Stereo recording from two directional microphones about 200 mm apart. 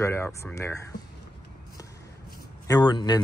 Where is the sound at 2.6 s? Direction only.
20° left (ahead or behind).